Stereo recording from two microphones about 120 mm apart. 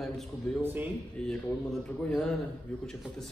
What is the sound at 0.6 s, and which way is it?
Speech, 15° right (ahead or behind).